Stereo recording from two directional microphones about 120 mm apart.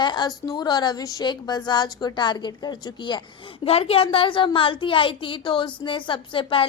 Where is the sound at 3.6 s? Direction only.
55° left (ahead or behind).